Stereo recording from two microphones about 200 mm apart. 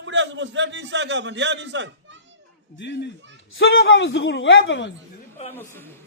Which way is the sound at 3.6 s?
70° left (ahead or behind).